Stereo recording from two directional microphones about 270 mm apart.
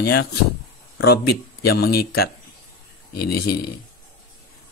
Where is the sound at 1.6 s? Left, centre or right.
Left.